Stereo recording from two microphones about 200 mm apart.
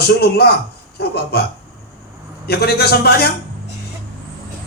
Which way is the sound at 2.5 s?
55° left (ahead or behind).